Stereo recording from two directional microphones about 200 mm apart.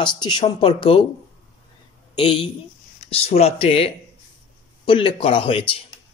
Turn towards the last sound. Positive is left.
turn(degrees=30)  # may be behind; listen again after turning